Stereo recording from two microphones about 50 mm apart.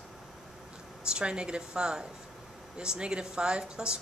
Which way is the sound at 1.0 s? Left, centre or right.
Centre.